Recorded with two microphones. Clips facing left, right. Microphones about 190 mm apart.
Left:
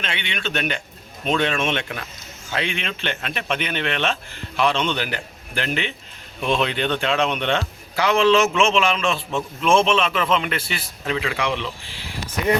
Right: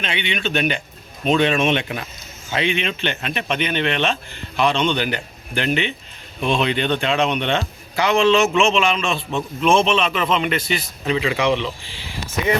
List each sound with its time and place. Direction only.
0.0 s speech: centre (ahead or behind)